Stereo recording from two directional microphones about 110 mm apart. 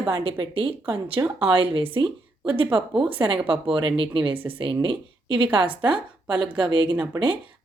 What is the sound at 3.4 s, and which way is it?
A woman's voice, 50° right (ahead or behind).